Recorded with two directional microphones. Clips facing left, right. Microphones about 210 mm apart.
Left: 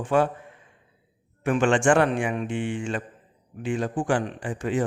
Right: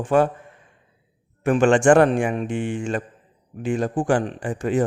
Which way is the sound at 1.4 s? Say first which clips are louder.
Right 5 dB; 45° right (ahead or behind).